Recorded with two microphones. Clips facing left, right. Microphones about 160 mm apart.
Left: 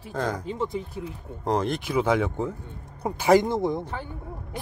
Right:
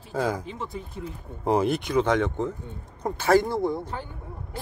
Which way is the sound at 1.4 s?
5° right (ahead or behind).